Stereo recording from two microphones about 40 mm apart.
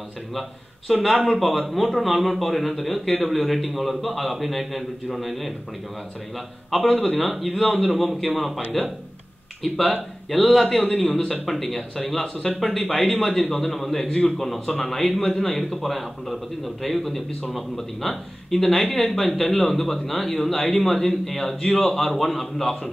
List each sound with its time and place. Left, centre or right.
0.3 s a man's voice: centre
14.0 s a man's voice: centre